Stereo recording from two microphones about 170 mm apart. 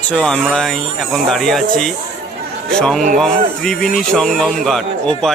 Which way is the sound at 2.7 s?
5° left (ahead or behind).